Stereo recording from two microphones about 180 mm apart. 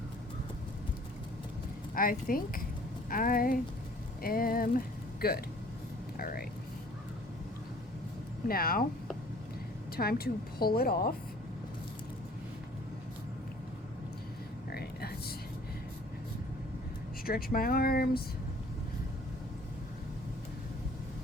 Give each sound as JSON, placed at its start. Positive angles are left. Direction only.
{"t": 2.0, "sound": "a woman's voice", "side_deg": 50}
{"t": 8.4, "sound": "a woman's voice", "side_deg": 55}
{"t": 9.9, "sound": "a woman's voice", "side_deg": 60}
{"t": 14.7, "sound": "a sound", "side_deg": 60}
{"t": 17.2, "sound": "a woman's voice", "side_deg": 55}